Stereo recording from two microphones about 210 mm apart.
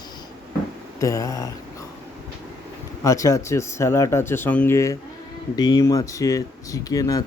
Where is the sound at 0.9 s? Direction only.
15° left (ahead or behind).